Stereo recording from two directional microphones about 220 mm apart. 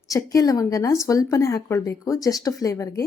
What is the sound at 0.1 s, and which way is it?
Speech, 15° left (ahead or behind).